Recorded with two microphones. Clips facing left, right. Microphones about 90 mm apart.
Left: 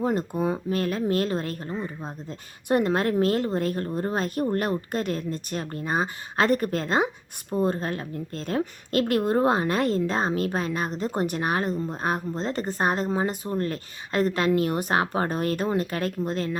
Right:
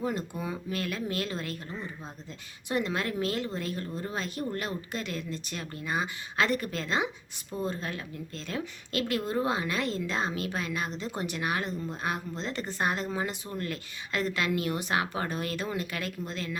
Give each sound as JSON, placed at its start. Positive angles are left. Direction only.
{"t": 0.0, "sound": "a woman's voice", "side_deg": 45}